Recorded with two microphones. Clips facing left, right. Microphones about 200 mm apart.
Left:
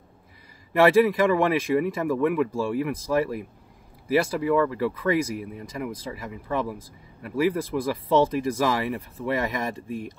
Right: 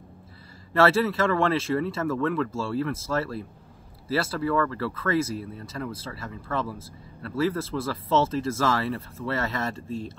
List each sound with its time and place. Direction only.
0.7 s speech: 15° left (ahead or behind)